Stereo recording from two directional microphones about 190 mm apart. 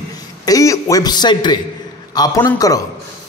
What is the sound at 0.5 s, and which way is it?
A man's voice, 15° left (ahead or behind).